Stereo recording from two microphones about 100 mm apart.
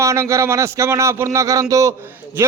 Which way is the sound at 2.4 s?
25° right (ahead or behind).